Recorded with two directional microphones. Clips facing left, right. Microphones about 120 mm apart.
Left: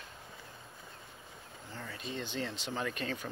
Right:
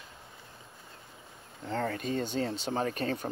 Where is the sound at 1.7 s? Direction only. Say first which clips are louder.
Right 12 dB; 60° right (ahead or behind); by 3.2 s 40° right (ahead or behind).